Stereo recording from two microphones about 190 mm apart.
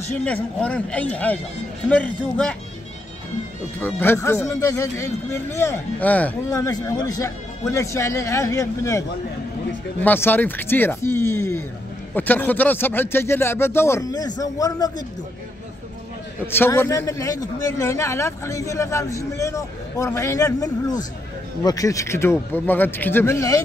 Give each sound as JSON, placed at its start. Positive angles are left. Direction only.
{"t": 0.1, "sound": "speech", "side_deg": 5}
{"t": 3.8, "sound": "speech", "side_deg": 10}
{"t": 10.0, "sound": "speech", "side_deg": 10}
{"t": 16.5, "sound": "speech", "side_deg": 10}